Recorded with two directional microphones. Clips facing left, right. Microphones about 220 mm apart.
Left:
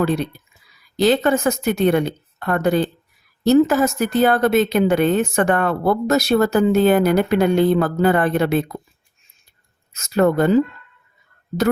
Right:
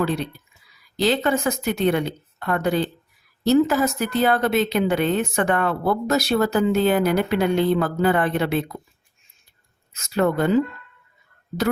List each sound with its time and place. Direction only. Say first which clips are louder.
0.9 s a woman's voice: left 4 dB; 45° left (ahead or behind)
9.9 s a woman's voice: left 4 dB; 45° left (ahead or behind)